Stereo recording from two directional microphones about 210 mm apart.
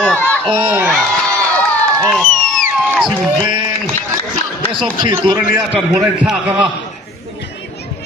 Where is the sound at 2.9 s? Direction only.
5° left (ahead or behind).